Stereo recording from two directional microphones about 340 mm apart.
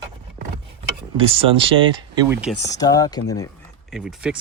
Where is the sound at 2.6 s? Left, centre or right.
Centre.